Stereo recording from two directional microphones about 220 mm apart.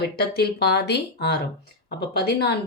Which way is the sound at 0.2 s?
45° left (ahead or behind).